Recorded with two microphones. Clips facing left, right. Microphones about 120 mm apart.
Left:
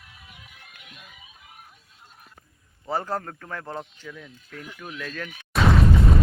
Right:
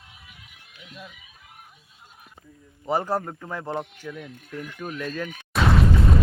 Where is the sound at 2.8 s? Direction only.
15° right (ahead or behind).